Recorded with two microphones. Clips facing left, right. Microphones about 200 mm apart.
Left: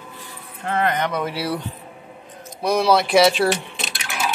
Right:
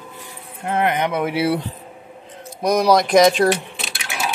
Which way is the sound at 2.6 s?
15° right (ahead or behind).